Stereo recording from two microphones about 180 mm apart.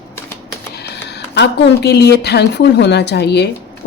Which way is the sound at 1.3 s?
70° left (ahead or behind).